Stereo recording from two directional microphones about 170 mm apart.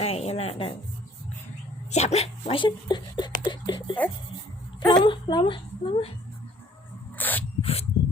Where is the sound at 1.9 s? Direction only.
40° left (ahead or behind).